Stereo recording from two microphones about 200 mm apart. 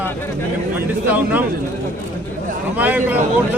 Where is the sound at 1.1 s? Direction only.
10° right (ahead or behind).